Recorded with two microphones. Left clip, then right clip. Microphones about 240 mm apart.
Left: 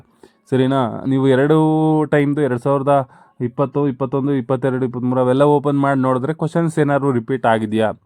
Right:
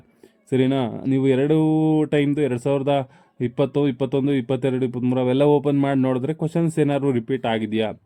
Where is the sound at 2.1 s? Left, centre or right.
Left.